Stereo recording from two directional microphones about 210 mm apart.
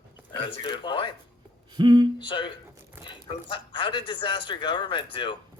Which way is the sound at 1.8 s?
20° right (ahead or behind).